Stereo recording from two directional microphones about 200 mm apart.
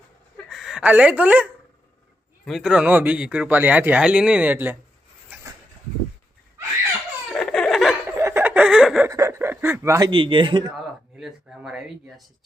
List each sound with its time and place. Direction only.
0.3 s speech: centre (ahead or behind)
7.3 s laughter: centre (ahead or behind)
8.0 s laughter: 10° right (ahead or behind)
9.0 s speech: 15° right (ahead or behind)
10.8 s speech: centre (ahead or behind)